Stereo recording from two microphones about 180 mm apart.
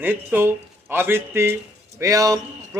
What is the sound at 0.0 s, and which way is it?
A man's voice, 10° right (ahead or behind).